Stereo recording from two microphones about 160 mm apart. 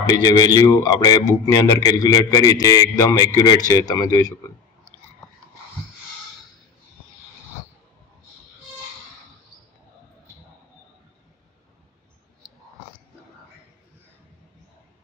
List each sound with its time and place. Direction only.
0.0 s a man's voice: 25° left (ahead or behind)